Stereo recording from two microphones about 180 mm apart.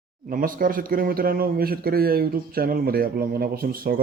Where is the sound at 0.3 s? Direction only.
50° right (ahead or behind).